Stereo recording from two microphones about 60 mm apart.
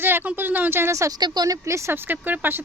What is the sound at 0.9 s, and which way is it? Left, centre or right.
Speech, right.